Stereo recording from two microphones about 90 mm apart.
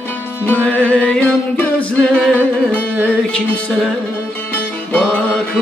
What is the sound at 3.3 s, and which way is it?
Music, 10° left (ahead or behind).